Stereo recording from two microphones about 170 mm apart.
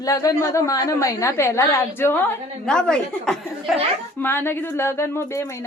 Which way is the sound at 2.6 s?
5° left (ahead or behind).